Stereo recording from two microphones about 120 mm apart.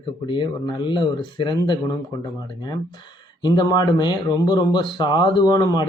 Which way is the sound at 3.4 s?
35° left (ahead or behind).